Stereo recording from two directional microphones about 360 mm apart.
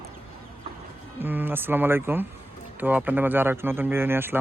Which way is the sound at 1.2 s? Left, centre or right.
Centre.